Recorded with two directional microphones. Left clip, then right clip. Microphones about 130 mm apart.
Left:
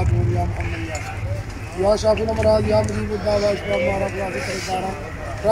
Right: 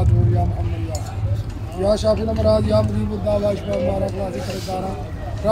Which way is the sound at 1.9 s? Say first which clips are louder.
Left 1 dB; 30° right (ahead or behind).